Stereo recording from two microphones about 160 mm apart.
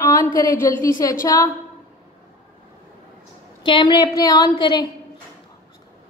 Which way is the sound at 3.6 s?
30° left (ahead or behind).